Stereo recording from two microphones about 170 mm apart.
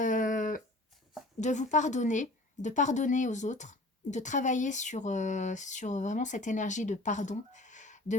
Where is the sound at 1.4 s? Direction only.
45° left (ahead or behind).